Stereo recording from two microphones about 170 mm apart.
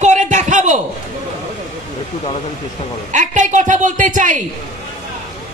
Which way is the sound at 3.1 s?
45° right (ahead or behind).